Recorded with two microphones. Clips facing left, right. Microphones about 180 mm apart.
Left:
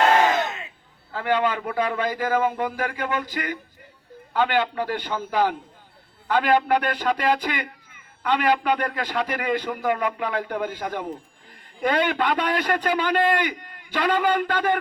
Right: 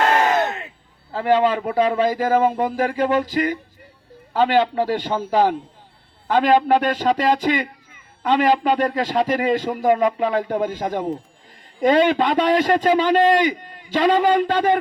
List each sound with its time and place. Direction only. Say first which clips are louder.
1.1 s a man's voice: right 5 dB; 30° right (ahead or behind)